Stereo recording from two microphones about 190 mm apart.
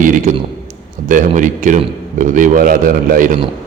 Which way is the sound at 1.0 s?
45° right (ahead or behind).